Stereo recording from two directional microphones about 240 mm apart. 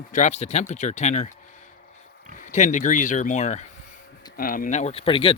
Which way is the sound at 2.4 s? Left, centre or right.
Left.